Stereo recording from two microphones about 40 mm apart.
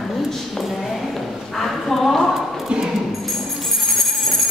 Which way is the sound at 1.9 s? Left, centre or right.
Centre.